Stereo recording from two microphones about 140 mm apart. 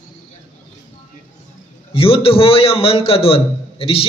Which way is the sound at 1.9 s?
40° left (ahead or behind).